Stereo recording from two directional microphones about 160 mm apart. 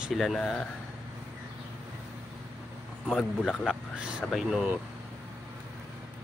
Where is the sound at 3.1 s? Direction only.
Centre (ahead or behind).